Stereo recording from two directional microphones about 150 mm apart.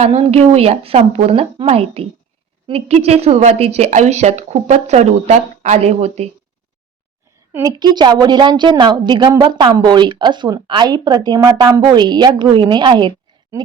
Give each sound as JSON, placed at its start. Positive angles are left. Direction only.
{"t": 0.0, "sound": "a woman's voice", "side_deg": -45}
{"t": 7.5, "sound": "a woman's voice", "side_deg": -25}